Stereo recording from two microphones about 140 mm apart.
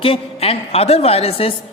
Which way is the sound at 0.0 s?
40° left (ahead or behind).